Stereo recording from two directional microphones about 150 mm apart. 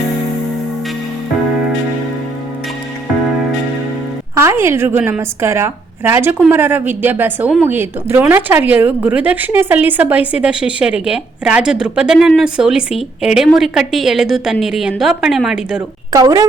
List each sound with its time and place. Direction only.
4.4 s a woman's voice: 20° right (ahead or behind)
16.1 s speech: 25° right (ahead or behind)